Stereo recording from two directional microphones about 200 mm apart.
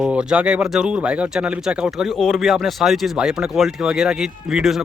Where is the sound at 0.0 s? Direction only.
5° right (ahead or behind).